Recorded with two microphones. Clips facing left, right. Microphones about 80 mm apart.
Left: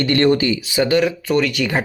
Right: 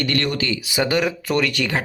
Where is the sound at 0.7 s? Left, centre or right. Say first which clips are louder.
Left 3 dB; centre.